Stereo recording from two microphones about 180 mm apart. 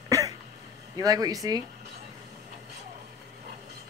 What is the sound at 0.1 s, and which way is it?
Throat clearing, 15° right (ahead or behind).